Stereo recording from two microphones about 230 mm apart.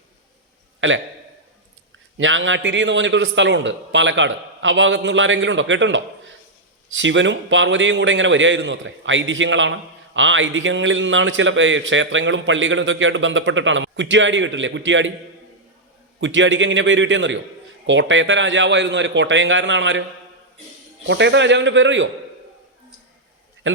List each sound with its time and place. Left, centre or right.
0.8 s a man's voice: right
2.1 s a man's voice: right
16.2 s a man's voice: right
21.1 s a man's voice: right
23.6 s a man's voice: right